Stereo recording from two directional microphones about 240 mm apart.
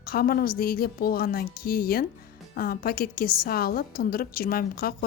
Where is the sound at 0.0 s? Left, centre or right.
Left.